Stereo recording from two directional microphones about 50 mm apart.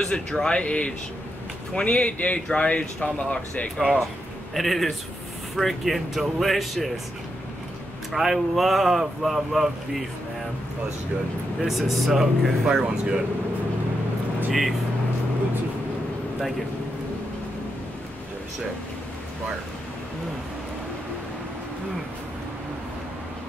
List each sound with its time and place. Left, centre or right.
0.0 s speech: centre
4.6 s speech: centre
8.1 s speech: centre
11.6 s speech: centre
14.5 s speech: centre